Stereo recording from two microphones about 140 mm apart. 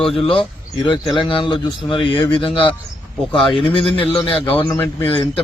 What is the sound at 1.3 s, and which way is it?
Speech, 35° left (ahead or behind).